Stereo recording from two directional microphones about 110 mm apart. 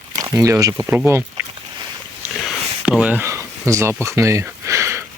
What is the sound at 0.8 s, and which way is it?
Speech, 15° right (ahead or behind).